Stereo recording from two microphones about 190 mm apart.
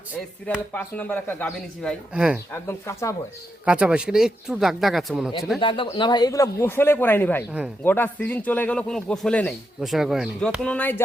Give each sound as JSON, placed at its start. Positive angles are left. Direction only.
{"t": 0.7, "sound": "speech", "side_deg": 10}
{"t": 2.5, "sound": "speech", "side_deg": 15}
{"t": 3.7, "sound": "speech", "side_deg": -5}
{"t": 5.5, "sound": "speech", "side_deg": 25}